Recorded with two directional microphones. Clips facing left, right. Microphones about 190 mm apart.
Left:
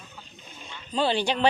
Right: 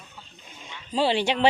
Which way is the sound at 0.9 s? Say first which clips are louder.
Right 2 dB; 25° right (ahead or behind).